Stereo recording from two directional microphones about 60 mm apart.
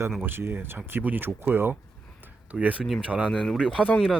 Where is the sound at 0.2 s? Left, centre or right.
Right.